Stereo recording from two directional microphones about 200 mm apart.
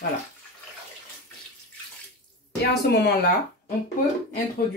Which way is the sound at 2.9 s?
55° left (ahead or behind).